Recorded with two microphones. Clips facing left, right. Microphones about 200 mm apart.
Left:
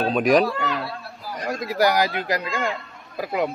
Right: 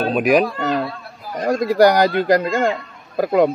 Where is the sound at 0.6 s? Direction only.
45° right (ahead or behind).